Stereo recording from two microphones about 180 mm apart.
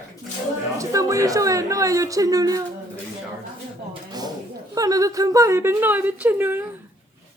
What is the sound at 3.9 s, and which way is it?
A woman's voice, 20° right (ahead or behind).